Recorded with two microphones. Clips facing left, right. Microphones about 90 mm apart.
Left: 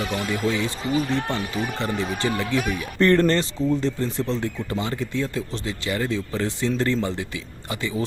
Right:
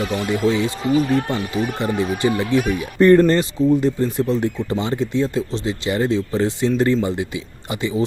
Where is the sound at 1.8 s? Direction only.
15° right (ahead or behind).